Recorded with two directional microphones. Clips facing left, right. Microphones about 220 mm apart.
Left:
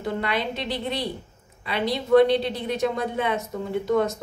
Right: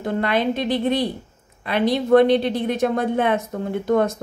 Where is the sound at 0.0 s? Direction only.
50° right (ahead or behind).